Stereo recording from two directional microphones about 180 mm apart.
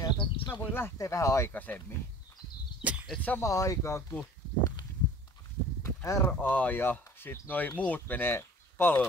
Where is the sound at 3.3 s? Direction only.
15° left (ahead or behind).